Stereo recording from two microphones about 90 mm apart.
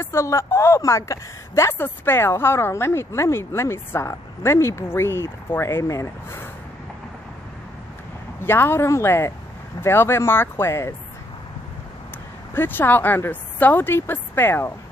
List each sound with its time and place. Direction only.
0.0 s a woman's voice: 30° left (ahead or behind)
8.4 s a woman's voice: 25° left (ahead or behind)
12.5 s a woman's voice: 20° left (ahead or behind)